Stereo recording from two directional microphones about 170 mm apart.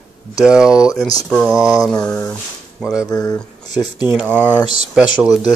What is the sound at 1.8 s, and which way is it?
Mantra, 5° left (ahead or behind).